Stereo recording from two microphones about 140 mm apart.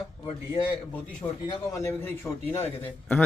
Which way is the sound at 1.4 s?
20° left (ahead or behind).